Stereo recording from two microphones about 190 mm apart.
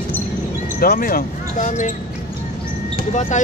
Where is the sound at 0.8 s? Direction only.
50° left (ahead or behind).